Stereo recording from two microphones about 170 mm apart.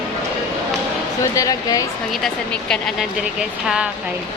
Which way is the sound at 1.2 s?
20° left (ahead or behind).